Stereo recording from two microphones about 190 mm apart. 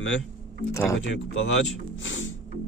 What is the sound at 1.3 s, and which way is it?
Speech, 90° left.